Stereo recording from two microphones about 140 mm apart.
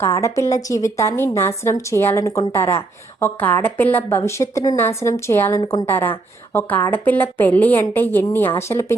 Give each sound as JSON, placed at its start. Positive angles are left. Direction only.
{"t": 0.0, "sound": "a woman's voice", "side_deg": 20}